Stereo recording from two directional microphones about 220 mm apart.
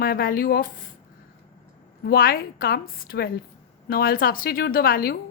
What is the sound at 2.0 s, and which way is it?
A woman's voice, 45° left (ahead or behind).